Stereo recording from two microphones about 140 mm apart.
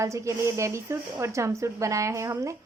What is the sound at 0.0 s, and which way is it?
A woman's voice, 20° right (ahead or behind).